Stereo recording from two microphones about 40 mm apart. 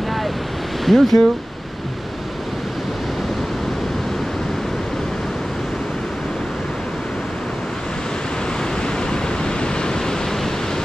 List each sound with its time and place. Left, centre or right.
0.8 s speech: centre
8.8 s pink noise: left